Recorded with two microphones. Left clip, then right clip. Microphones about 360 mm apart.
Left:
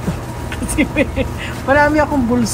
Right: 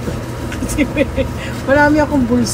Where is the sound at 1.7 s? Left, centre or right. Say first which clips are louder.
Right 1 dB; centre.